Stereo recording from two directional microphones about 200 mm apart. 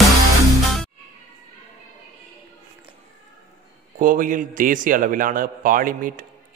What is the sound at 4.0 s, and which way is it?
A man's voice, 40° right (ahead or behind).